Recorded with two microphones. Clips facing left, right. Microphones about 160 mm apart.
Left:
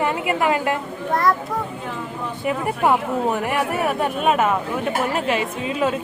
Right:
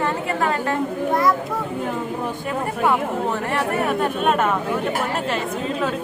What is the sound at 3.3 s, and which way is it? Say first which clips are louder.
Speech: even; 10° left (ahead or behind).